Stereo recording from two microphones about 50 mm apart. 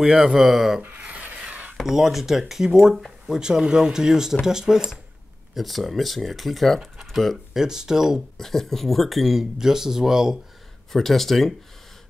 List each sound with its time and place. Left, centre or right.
0.0 s speech: centre
0.9 s rub: right
1.8 s speech: centre
5.5 s speech: centre
7.6 s speech: centre
8.4 s speech: centre
10.9 s speech: centre